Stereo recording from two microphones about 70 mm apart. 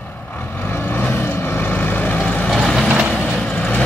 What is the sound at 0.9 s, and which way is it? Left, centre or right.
Vehicle, left.